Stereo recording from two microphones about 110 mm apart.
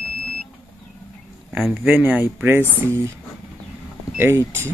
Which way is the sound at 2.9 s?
25° right (ahead or behind).